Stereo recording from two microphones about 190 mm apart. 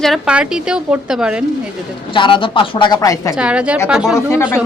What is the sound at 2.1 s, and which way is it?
A woman's voice, 25° left (ahead or behind).